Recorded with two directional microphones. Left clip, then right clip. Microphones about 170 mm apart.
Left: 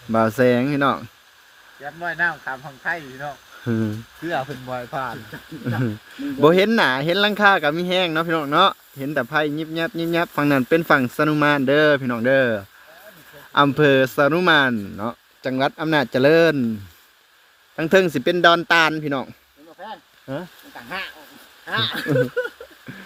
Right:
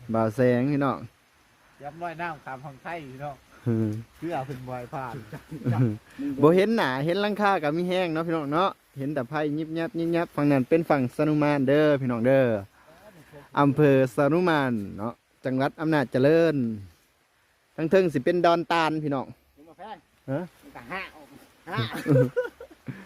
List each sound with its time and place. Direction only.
0.1 s speech: centre (ahead or behind)
4.3 s speech: 35° left (ahead or behind)
4.7 s speech: 55° left (ahead or behind)
6.4 s speech: 5° right (ahead or behind)
17.7 s speech: 5° right (ahead or behind)
19.8 s a sound: 30° right (ahead or behind)
20.7 s speech: 45° right (ahead or behind)
21.7 s speech: 65° right (ahead or behind)